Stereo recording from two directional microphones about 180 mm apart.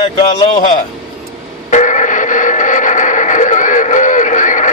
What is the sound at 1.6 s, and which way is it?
Radio, 40° left (ahead or behind).